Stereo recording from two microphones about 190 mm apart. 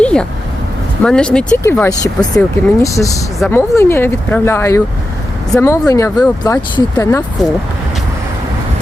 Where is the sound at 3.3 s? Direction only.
5° left (ahead or behind).